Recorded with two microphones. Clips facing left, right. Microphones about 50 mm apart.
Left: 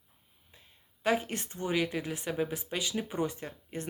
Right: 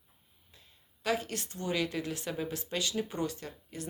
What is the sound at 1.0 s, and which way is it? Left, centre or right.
Speech, left.